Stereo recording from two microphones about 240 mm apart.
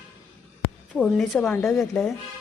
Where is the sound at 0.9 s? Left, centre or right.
Centre.